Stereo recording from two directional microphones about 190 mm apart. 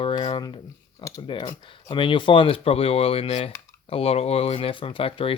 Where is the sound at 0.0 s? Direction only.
25° left (ahead or behind).